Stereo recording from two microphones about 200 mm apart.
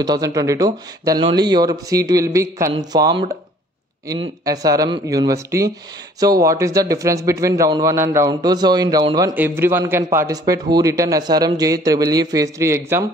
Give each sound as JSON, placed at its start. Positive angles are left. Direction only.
{"t": 0.0, "sound": "a man's voice", "side_deg": -20}
{"t": 4.5, "sound": "a man's voice", "side_deg": -20}